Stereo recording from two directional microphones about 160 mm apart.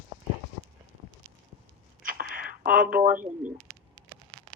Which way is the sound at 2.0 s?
65° right (ahead or behind).